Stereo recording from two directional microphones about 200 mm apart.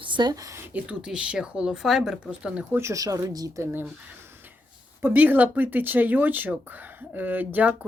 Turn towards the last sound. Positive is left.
turn(degrees=-10)  # may be behind; listen again after turning